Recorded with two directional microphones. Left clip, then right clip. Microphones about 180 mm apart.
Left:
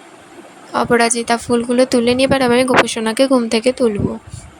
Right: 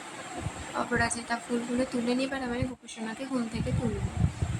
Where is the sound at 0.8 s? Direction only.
50° left (ahead or behind).